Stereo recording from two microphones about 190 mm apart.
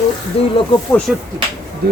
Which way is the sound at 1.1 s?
5° right (ahead or behind).